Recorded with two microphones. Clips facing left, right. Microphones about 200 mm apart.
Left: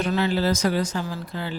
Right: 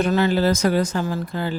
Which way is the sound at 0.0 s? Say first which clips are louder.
Right 4 dB; 50° right (ahead or behind).